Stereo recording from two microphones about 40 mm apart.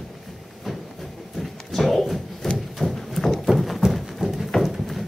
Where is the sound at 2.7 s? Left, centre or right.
Centre.